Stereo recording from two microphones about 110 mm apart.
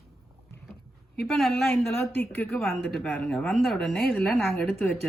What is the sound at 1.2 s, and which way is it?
Speech, centre (ahead or behind).